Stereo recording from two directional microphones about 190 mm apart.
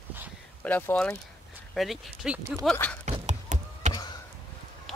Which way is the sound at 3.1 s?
40° right (ahead or behind).